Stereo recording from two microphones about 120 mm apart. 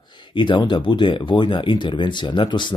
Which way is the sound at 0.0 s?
40° left (ahead or behind).